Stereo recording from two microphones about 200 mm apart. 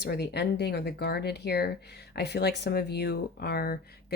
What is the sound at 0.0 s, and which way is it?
Speech, 55° left (ahead or behind).